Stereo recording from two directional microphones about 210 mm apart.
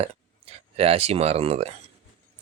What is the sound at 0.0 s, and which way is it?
Speech, 30° right (ahead or behind).